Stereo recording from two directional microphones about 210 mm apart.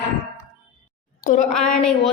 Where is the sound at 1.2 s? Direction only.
40° left (ahead or behind).